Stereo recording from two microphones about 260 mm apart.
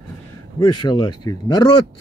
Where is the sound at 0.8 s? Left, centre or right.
Centre.